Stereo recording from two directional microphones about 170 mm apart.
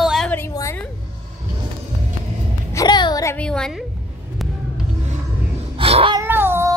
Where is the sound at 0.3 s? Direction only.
15° left (ahead or behind).